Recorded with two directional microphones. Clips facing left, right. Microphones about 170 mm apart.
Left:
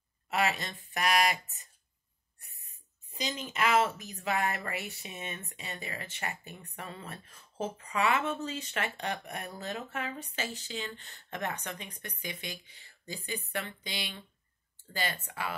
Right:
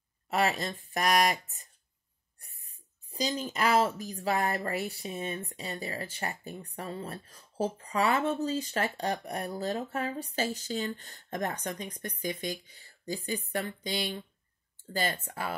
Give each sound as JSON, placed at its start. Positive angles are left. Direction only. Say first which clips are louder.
{"t": 0.3, "sound": "speech", "louder": "right 2 dB", "side_deg": -40}
{"t": 3.1, "sound": "speech", "louder": "right 5 dB", "side_deg": -35}